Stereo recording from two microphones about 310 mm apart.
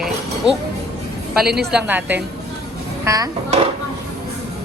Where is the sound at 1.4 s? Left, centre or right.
Right.